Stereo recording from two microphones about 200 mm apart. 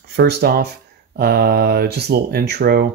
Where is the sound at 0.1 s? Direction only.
55° right (ahead or behind).